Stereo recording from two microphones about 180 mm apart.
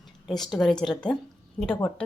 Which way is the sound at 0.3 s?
20° left (ahead or behind).